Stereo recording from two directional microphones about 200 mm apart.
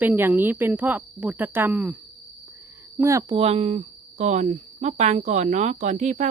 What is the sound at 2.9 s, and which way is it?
Speech, 15° right (ahead or behind).